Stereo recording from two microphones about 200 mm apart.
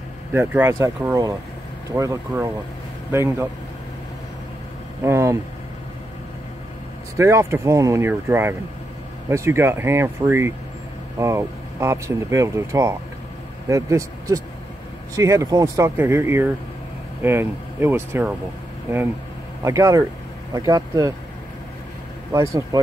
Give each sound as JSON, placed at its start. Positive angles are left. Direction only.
{"t": 0.3, "sound": "speech", "side_deg": -10}
{"t": 5.0, "sound": "speech", "side_deg": -15}
{"t": 7.2, "sound": "speech", "side_deg": -15}
{"t": 19.6, "sound": "speech", "side_deg": -15}
{"t": 22.3, "sound": "speech", "side_deg": -15}